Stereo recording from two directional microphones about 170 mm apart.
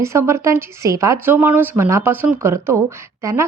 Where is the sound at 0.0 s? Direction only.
15° right (ahead or behind).